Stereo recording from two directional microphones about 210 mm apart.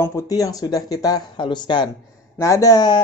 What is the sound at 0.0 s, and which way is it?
Speech, 15° left (ahead or behind).